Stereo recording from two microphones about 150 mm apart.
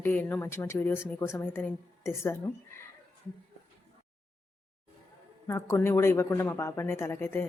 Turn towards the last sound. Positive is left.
turn(degrees=15)  # may be behind; listen again after turning